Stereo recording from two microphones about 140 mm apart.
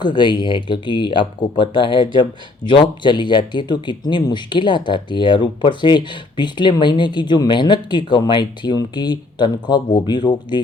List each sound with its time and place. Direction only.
0.0 s speech: 35° left (ahead or behind)